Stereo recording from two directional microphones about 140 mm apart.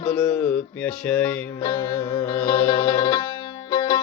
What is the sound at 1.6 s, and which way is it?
Music, 25° left (ahead or behind).